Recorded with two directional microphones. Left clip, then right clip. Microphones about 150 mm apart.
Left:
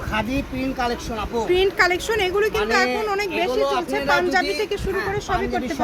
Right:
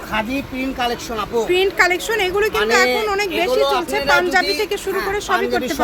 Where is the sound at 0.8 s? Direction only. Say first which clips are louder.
Right 4 dB; 55° right (ahead or behind).